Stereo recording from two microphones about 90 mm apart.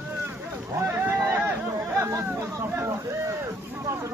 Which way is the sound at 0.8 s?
25° right (ahead or behind).